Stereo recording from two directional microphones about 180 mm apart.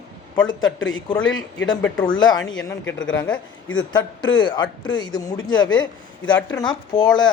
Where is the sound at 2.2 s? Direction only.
25° left (ahead or behind).